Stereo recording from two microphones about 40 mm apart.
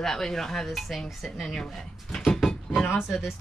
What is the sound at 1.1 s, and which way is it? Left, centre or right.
Speech, centre.